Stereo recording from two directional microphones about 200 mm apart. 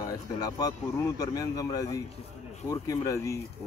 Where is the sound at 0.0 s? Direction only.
20° left (ahead or behind).